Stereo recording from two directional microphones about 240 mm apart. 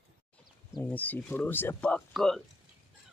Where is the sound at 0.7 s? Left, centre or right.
Centre.